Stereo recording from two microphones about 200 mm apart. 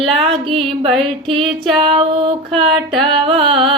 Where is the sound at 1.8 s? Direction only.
25° right (ahead or behind).